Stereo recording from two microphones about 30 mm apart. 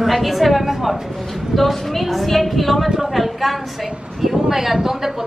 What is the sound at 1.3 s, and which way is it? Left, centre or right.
A woman's voice, centre.